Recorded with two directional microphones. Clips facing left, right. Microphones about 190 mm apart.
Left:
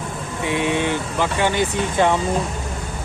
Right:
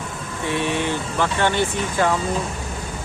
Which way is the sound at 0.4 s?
15° left (ahead or behind).